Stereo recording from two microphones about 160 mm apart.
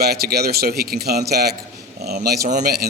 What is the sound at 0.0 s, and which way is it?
Speech, 75° right (ahead or behind).